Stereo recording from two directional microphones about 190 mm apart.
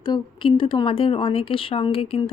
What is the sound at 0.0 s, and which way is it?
Speech, 25° left (ahead or behind).